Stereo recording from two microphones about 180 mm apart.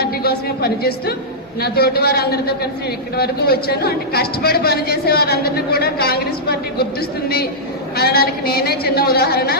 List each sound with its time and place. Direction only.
0.0 s a woman's voice: 60° left (ahead or behind)
7.9 s a woman's voice: 60° left (ahead or behind)